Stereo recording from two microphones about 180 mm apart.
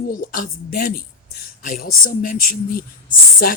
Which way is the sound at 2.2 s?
50° left (ahead or behind).